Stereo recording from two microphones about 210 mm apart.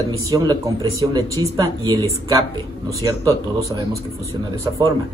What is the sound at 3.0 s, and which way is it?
Speech, 15° right (ahead or behind).